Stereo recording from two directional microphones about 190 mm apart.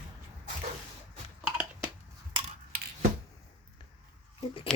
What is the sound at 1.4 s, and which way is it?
Typing, 5° right (ahead or behind).